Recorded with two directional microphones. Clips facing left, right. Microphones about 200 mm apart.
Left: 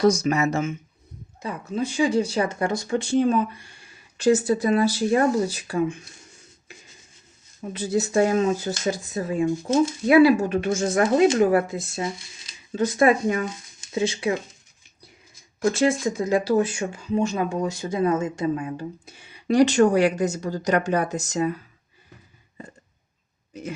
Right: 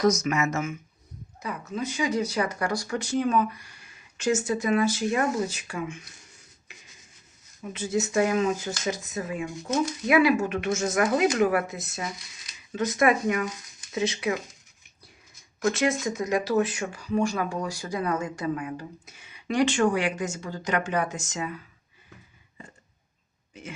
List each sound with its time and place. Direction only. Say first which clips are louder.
0.0 s speech: left 4 dB; 30° left (ahead or behind)
7.6 s speech: left 3 dB; 35° left (ahead or behind)
15.6 s speech: left 4 dB; 30° left (ahead or behind)
23.5 s speech: left 8 dB; 40° left (ahead or behind)